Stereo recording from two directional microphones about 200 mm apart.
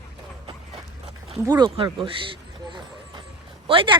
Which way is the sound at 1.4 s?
20° right (ahead or behind).